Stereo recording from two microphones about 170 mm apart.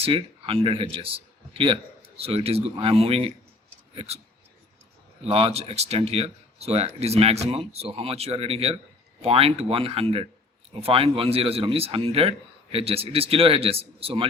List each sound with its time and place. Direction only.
0.0 s a man's voice: 30° right (ahead or behind)
5.3 s speech: 35° right (ahead or behind)